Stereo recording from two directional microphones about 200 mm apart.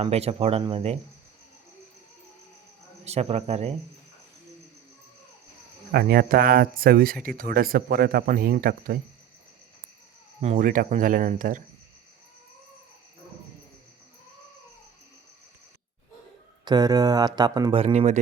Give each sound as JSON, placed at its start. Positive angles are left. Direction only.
{"t": 0.0, "sound": "speech", "side_deg": -30}
{"t": 3.0, "sound": "speech", "side_deg": -30}
{"t": 5.9, "sound": "speech", "side_deg": -50}
{"t": 10.4, "sound": "speech", "side_deg": -40}
{"t": 16.6, "sound": "speech", "side_deg": -20}